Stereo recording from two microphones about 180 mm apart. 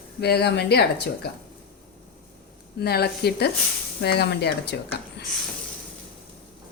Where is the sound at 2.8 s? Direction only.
65° left (ahead or behind).